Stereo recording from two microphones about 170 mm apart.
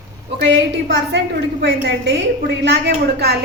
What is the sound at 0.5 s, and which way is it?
A woman's voice, 80° right.